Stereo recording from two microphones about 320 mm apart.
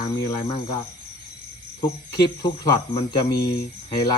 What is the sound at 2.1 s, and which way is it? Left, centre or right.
Speech, centre.